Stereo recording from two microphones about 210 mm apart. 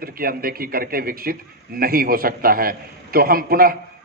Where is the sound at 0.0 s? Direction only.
45° right (ahead or behind).